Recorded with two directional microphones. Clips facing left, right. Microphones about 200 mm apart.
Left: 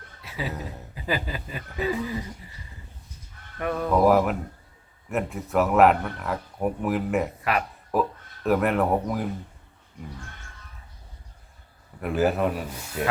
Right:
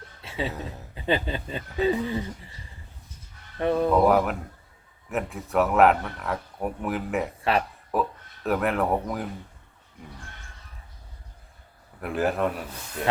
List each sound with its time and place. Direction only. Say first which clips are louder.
0.2 s a sound: right 3 dB; 25° right (ahead or behind)
0.4 s speech: even; centre (ahead or behind)
0.9 s speech: right 3 dB; 25° right (ahead or behind)
3.6 s speech: right 5 dB; 25° right (ahead or behind)
3.8 s speech: left 2 dB; centre (ahead or behind)
7.5 s speech: right 4 dB; 30° right (ahead or behind)
7.9 s speech: left 2 dB; centre (ahead or behind)
11.9 s speech: left 2 dB; centre (ahead or behind)